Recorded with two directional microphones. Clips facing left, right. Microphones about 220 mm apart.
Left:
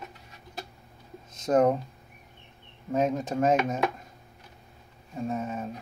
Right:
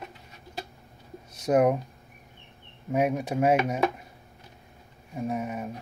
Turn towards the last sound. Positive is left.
turn(degrees=-15)  # may be behind; listen again after turning